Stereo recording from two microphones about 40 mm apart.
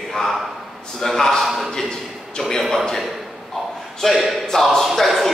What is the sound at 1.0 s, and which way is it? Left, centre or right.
Speech, centre.